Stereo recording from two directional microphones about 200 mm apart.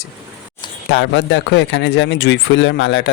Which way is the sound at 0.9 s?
65° left (ahead or behind).